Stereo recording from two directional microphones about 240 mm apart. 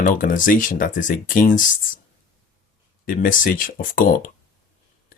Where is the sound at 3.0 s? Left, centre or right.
Left.